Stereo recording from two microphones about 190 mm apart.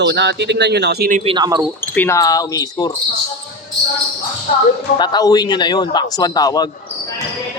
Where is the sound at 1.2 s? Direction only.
25° right (ahead or behind).